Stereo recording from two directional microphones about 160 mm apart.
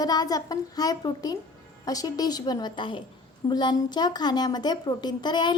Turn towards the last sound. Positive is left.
turn(degrees=30)  # may be behind; listen again after turning